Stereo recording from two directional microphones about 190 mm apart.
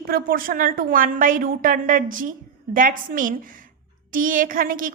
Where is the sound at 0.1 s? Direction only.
50° right (ahead or behind).